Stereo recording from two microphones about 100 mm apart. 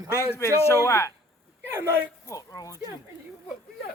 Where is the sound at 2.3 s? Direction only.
35° left (ahead or behind).